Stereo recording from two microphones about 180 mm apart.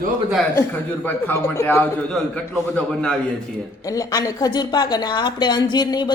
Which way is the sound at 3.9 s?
20° left (ahead or behind).